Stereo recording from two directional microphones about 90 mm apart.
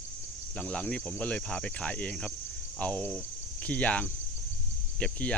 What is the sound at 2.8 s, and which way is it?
Cricket, 15° left (ahead or behind).